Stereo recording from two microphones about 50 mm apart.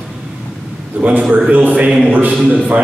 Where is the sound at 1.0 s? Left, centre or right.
Right.